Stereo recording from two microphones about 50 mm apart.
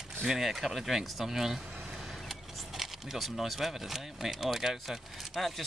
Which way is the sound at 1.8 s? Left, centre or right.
Centre.